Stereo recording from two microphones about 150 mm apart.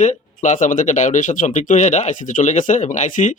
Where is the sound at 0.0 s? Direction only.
55° left (ahead or behind).